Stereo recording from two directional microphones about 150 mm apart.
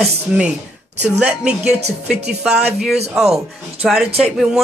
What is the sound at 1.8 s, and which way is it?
Speech, 45° right (ahead or behind).